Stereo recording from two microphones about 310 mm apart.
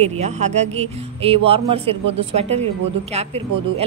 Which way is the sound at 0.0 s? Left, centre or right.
Right.